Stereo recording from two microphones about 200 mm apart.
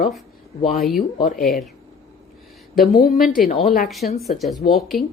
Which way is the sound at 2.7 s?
Centre (ahead or behind).